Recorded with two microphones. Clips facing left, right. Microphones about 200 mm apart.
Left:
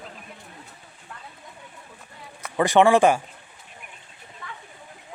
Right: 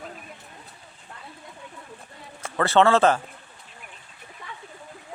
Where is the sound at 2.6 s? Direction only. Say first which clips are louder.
Left 2 dB; 15° left (ahead or behind).